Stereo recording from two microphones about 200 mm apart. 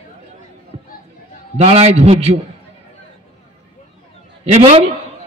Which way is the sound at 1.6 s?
30° right (ahead or behind).